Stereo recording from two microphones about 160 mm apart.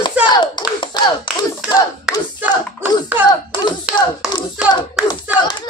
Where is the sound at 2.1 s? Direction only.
5° right (ahead or behind).